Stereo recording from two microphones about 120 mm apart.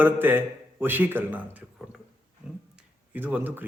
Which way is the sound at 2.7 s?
15° right (ahead or behind).